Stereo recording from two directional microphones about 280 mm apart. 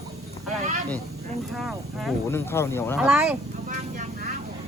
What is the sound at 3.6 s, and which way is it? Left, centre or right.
Vehicle, right.